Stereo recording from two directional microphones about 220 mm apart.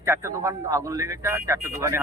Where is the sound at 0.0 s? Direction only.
10° right (ahead or behind).